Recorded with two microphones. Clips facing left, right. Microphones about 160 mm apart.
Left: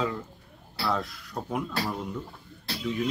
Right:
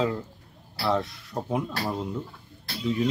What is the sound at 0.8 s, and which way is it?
Speech, 25° right (ahead or behind).